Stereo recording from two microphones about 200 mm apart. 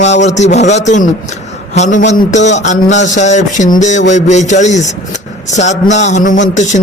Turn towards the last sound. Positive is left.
turn(degrees=35)  # may be behind; listen again after turning